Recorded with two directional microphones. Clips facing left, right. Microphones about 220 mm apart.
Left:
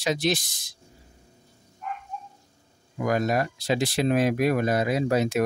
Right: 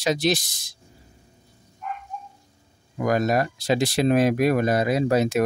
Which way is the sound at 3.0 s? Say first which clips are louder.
Right 3 dB; 40° right (ahead or behind).